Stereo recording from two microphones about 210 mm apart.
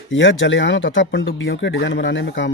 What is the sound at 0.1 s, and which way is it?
Speech, 65° left (ahead or behind).